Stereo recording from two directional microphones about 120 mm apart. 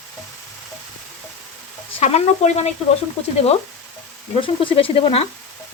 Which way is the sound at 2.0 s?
65° left (ahead or behind).